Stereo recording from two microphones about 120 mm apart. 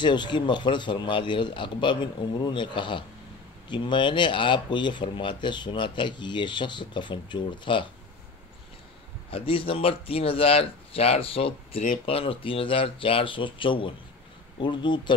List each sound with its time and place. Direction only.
0.0 s speech: 40° left (ahead or behind)
9.3 s speech: 50° left (ahead or behind)